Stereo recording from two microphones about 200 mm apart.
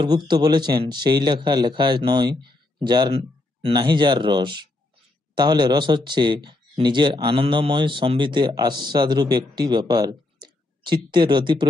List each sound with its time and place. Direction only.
0.0 s speech: 20° right (ahead or behind)